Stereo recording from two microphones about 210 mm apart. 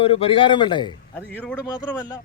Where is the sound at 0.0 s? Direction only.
25° left (ahead or behind).